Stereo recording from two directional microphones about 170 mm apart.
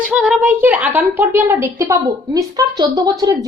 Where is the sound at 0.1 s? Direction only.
5° right (ahead or behind).